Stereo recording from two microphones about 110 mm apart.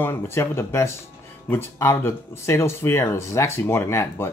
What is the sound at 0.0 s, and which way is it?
Speech, 20° left (ahead or behind).